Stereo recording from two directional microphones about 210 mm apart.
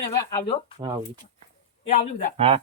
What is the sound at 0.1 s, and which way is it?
Speech, 15° left (ahead or behind).